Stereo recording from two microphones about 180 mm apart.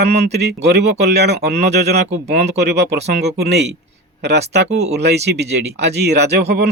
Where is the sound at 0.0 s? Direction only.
65° right (ahead or behind).